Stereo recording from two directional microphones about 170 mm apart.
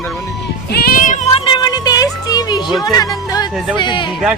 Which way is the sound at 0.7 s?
65° left (ahead or behind).